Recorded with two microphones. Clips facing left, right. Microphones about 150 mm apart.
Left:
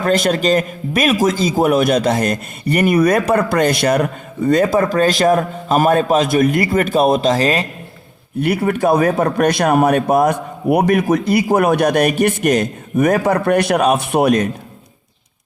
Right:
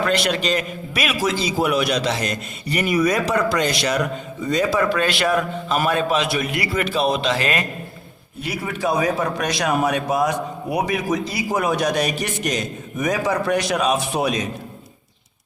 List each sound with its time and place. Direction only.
0.0 s a man's voice: 45° left (ahead or behind)
8.4 s a man's voice: 60° left (ahead or behind)